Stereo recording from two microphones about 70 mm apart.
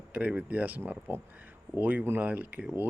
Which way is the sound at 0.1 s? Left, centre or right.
Right.